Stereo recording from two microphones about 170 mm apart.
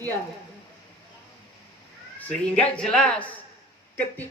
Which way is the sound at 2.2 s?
10° left (ahead or behind).